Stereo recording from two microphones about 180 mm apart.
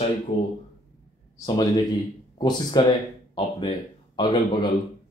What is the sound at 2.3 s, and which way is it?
Speech, 25° left (ahead or behind).